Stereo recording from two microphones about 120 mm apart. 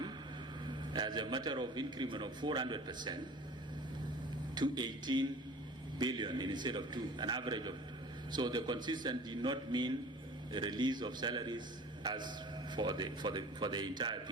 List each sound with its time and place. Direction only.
0.9 s a man's voice: 40° right (ahead or behind)
4.5 s a man's voice: 40° right (ahead or behind)